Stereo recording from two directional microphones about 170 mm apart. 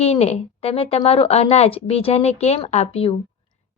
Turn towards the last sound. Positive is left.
turn(degrees=35)  # may be behind; listen again after turning